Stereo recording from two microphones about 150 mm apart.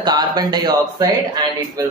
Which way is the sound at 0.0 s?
25° right (ahead or behind).